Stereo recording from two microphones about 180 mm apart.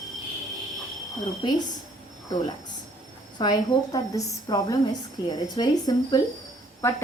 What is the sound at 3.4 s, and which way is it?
A woman's voice, 20° left (ahead or behind).